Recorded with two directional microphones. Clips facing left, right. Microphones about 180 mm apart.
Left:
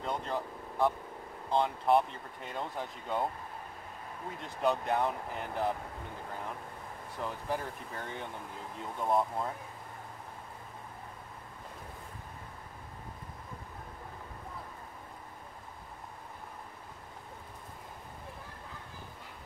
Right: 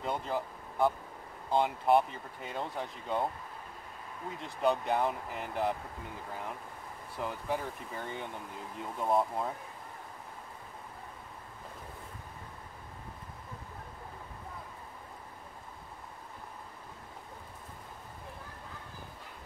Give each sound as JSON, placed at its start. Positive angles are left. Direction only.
{"t": 0.0, "sound": "speech", "side_deg": -5}
{"t": 4.4, "sound": "speech", "side_deg": 0}
{"t": 7.2, "sound": "speech", "side_deg": -5}